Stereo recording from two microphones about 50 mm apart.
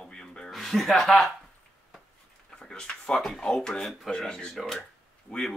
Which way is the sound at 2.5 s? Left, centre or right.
Centre.